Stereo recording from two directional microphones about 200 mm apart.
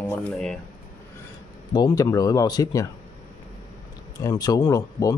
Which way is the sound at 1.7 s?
20° left (ahead or behind).